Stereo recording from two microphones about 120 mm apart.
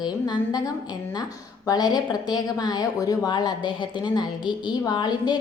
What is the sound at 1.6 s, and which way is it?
A woman's voice, 30° left (ahead or behind).